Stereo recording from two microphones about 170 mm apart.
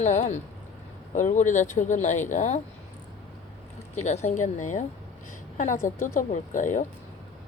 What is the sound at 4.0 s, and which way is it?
Speech, 45° left (ahead or behind).